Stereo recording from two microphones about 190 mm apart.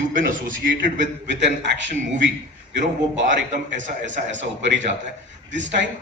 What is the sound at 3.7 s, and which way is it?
Speech, 40° right (ahead or behind).